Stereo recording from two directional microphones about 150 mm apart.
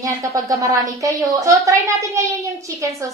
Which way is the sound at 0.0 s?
20° right (ahead or behind).